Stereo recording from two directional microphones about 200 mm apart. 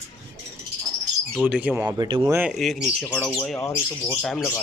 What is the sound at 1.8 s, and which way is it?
Speech, 20° right (ahead or behind).